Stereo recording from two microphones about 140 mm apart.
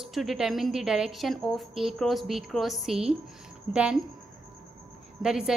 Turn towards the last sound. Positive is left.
turn(degrees=-5)  # may be behind; listen again after turning